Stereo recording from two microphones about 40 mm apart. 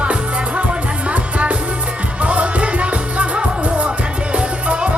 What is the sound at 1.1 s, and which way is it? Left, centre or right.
Music, right.